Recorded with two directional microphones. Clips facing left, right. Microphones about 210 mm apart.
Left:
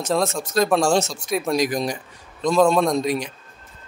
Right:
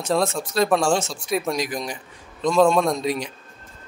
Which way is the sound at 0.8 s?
40° left (ahead or behind).